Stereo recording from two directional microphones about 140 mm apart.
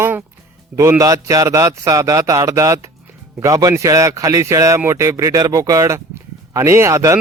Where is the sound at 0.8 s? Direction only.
20° right (ahead or behind).